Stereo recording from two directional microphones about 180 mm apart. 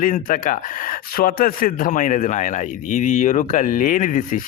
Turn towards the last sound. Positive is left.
turn(degrees=45)  # may be behind; listen again after turning